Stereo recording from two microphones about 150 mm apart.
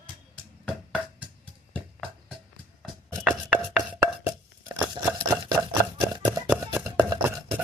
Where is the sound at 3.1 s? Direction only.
Centre (ahead or behind).